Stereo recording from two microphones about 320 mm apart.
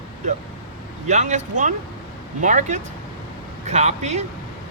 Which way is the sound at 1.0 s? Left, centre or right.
Right.